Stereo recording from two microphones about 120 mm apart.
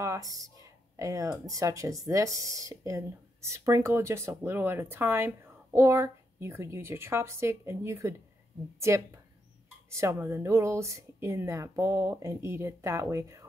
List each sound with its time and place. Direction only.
0.0 s speech: 30° right (ahead or behind)